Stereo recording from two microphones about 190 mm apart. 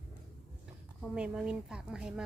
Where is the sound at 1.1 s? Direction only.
5° right (ahead or behind).